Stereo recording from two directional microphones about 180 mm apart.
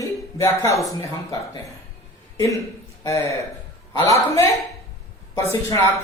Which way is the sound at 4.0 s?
15° left (ahead or behind).